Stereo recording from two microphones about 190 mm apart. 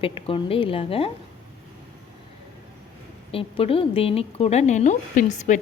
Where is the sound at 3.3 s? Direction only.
30° left (ahead or behind).